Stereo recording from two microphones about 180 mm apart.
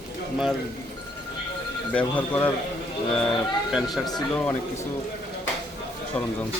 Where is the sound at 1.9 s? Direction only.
10° left (ahead or behind).